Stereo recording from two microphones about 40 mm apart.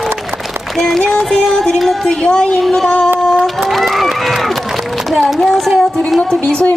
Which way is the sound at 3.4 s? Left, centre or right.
Centre.